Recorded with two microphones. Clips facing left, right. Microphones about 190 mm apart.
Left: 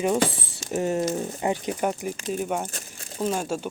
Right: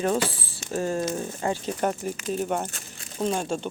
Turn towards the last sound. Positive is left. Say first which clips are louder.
# even
turn(degrees=5)  # may be behind; listen again after turning